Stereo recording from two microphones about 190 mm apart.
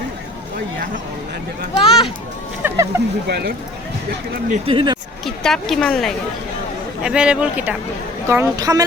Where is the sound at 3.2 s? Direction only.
60° right (ahead or behind).